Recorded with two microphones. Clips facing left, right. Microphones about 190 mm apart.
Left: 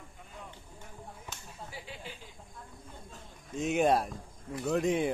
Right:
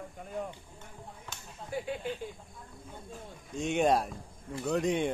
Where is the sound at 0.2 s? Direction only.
50° right (ahead or behind).